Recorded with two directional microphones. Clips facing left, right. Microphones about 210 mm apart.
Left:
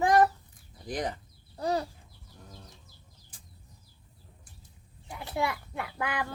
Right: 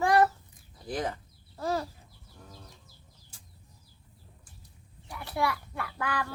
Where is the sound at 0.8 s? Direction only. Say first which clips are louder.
Even; 15° left (ahead or behind).